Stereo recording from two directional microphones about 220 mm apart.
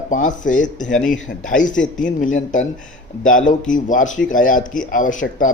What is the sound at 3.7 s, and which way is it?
A man's voice, 35° left (ahead or behind).